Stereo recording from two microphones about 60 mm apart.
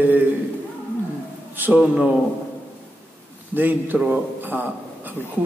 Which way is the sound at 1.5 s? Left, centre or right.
Right.